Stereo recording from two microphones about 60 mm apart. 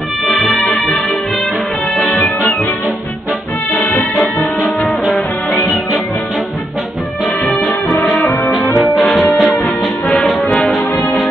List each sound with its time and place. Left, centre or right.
0.3 s music: centre
2.0 s music: left
3.7 s brass instrument: left
4.2 s music: left
8.7 s brass instrument: centre
9.2 s music: centre
10.7 s brass instrument: centre